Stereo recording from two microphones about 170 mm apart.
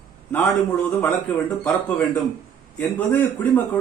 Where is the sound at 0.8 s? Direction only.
15° left (ahead or behind).